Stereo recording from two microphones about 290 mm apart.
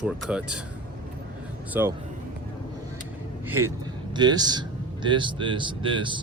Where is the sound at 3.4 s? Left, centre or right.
Centre.